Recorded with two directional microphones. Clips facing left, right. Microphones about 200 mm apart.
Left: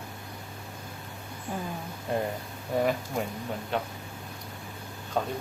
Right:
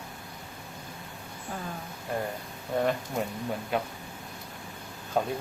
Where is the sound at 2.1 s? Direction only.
25° left (ahead or behind).